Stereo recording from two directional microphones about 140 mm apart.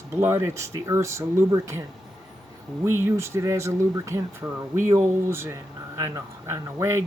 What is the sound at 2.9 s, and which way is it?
Speech, 20° right (ahead or behind).